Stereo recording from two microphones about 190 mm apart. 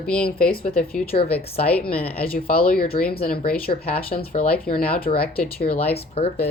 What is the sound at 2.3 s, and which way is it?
Speech, 50° left (ahead or behind).